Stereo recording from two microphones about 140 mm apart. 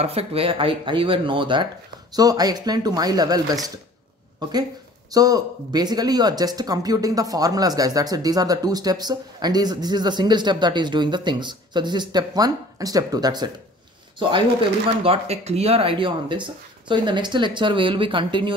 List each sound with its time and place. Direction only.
0.0 s speech: 45° right (ahead or behind); by 3.8 s 25° right (ahead or behind)
5.1 s speech: 25° right (ahead or behind)
15.0 s speech: 50° right (ahead or behind)